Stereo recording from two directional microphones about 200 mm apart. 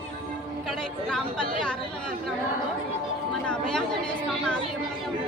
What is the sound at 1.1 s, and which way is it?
Speech, 5° left (ahead or behind).